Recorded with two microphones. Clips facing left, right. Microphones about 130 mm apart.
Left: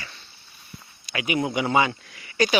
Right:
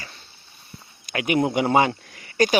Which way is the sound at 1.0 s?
55° right (ahead or behind).